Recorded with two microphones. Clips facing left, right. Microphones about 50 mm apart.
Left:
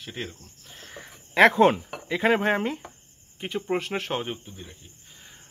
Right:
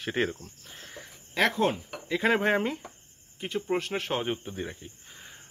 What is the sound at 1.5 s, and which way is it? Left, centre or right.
Speech, left.